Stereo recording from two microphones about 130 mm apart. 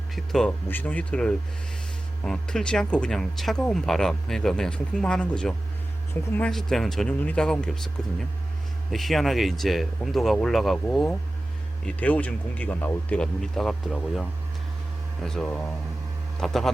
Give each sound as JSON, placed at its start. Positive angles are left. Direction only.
{"t": 0.2, "sound": "speech", "side_deg": 5}
{"t": 8.9, "sound": "speech", "side_deg": 0}